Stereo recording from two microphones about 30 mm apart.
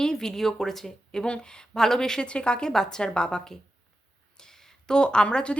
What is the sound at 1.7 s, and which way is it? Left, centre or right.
Speech, centre.